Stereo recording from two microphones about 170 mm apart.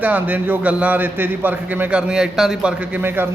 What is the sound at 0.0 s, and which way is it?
A man's voice, 10° right (ahead or behind).